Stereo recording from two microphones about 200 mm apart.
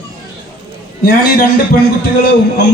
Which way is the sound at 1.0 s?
50° left (ahead or behind).